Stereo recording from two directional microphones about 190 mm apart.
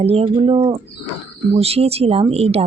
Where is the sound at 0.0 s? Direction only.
30° right (ahead or behind).